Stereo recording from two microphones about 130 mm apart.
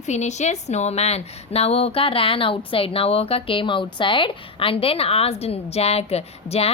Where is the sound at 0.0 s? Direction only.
60° left (ahead or behind).